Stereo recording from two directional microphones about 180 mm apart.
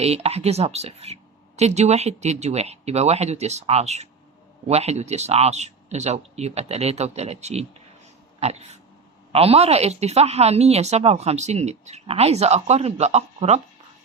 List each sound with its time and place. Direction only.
0.0 s a woman's voice: 35° right (ahead or behind)
8.4 s dog: 35° right (ahead or behind)
9.3 s a woman's voice: 35° right (ahead or behind)